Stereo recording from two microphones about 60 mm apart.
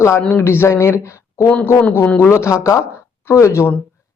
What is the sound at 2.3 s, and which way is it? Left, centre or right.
Speech, left.